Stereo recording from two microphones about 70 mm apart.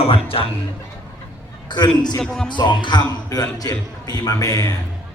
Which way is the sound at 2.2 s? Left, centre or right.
Centre.